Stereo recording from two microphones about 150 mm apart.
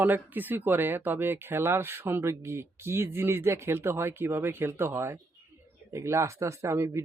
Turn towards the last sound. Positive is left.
turn(degrees=-20)  # may be behind; listen again after turning